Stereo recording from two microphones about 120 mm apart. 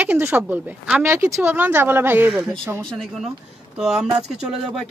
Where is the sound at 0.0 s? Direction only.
20° right (ahead or behind).